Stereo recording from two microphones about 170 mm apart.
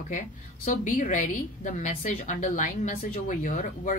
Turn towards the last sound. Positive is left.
turn(degrees=50)  # may be behind; listen again after turning